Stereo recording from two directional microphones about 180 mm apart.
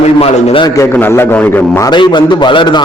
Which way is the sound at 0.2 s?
30° left (ahead or behind).